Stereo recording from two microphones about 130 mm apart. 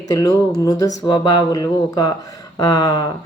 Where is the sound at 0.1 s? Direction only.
25° left (ahead or behind).